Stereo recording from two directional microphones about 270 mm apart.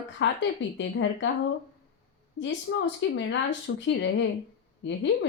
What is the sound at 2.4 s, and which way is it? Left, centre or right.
A woman's voice, left.